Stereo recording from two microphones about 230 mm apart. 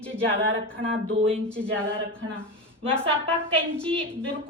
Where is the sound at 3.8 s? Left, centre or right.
Centre.